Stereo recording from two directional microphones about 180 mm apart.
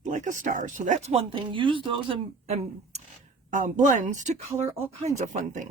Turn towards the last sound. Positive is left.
turn(degrees=-40)  # may be behind; listen again after turning